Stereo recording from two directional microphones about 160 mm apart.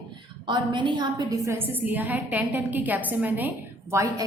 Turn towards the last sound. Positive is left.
turn(degrees=-20)  # may be behind; listen again after turning